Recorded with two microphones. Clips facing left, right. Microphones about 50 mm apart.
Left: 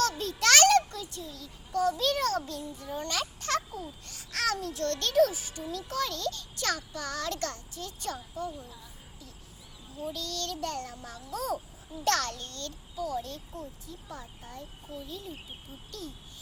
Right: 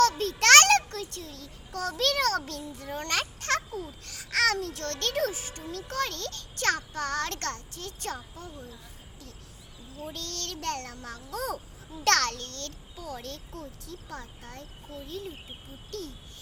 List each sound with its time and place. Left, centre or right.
0.0 s a sound: right
4.0 s a child's voice: right
10.1 s a child's voice: right
12.0 s a child's voice: right
13.6 s speech: right
15.0 s a child's voice: right